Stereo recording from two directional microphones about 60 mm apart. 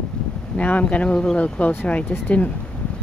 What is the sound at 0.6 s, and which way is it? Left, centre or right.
Speech, left.